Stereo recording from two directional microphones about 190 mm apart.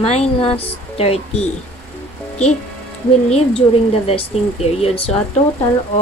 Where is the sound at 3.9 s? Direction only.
30° left (ahead or behind).